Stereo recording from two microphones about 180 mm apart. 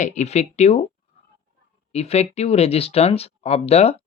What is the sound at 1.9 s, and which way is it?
Speech, 35° left (ahead or behind).